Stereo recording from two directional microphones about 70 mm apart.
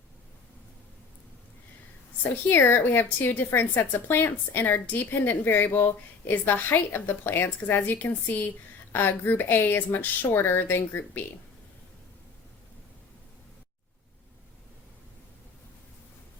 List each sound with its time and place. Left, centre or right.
2.5 s speech: left